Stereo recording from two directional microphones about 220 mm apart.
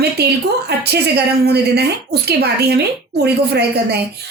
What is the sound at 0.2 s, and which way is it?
A woman's voice, 45° right (ahead or behind).